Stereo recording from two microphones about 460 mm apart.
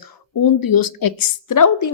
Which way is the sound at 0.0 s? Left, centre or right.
Left.